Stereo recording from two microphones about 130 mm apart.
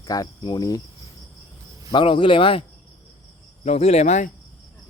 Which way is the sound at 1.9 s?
40° left (ahead or behind).